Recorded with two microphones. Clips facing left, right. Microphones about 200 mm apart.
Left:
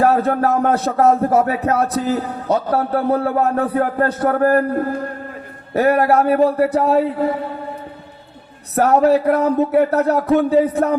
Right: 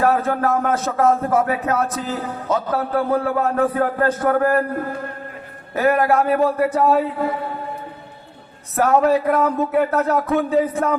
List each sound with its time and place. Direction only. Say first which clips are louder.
0.0 s music: left 3 dB; 35° left (ahead or behind)
5.7 s music: left 3 dB; 35° left (ahead or behind)
8.7 s music: left 3 dB; 40° left (ahead or behind)